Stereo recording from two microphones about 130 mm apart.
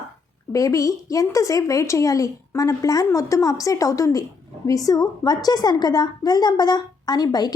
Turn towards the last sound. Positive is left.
turn(degrees=30)  # may be behind; listen again after turning